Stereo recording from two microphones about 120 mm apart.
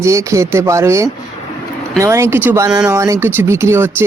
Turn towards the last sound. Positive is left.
turn(degrees=-20)  # may be behind; listen again after turning